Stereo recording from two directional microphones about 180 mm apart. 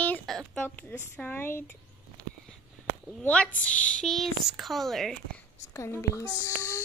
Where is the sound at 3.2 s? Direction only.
5° left (ahead or behind).